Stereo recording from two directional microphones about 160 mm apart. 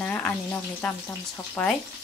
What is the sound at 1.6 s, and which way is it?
Speech, 10° left (ahead or behind).